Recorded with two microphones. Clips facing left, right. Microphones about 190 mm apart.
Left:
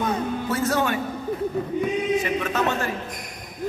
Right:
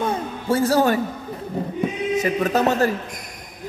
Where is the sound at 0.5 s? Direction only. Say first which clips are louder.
Right 7 dB; 30° right (ahead or behind).